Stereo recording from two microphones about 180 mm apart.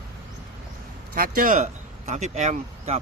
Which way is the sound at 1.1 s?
50° right (ahead or behind).